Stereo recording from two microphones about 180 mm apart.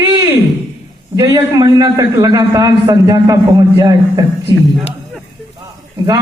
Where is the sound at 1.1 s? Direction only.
20° right (ahead or behind).